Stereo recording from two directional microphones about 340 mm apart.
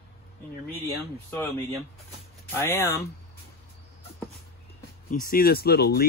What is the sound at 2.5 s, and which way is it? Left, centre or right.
Speech, centre.